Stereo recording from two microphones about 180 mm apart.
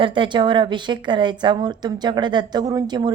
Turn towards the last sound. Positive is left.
turn(degrees=-25)  # may be behind; listen again after turning